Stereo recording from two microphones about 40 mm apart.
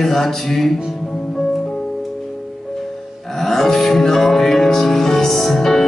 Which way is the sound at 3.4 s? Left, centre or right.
Centre.